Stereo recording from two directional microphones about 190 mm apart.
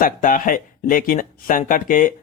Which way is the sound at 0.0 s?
45° left (ahead or behind).